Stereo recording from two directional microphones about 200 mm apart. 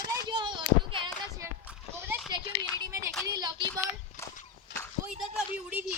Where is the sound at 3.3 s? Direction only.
20° right (ahead or behind).